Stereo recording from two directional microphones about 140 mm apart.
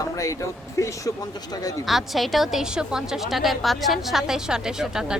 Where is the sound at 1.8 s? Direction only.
Centre (ahead or behind).